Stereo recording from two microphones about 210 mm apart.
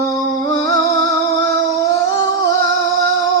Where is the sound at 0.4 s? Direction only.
15° left (ahead or behind).